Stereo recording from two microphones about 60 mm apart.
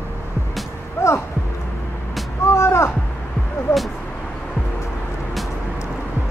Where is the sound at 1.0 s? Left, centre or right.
Left.